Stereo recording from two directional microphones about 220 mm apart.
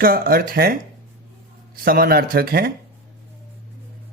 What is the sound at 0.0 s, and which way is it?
Speech, 40° right (ahead or behind).